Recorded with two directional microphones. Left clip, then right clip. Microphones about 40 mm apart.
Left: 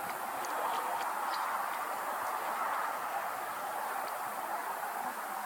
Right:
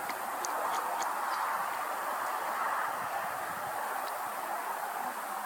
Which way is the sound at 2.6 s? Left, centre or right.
Centre.